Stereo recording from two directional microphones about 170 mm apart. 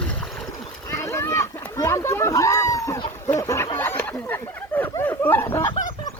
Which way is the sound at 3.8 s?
10° left (ahead or behind).